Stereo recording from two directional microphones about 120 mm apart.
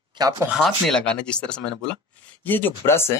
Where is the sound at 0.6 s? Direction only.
5° left (ahead or behind).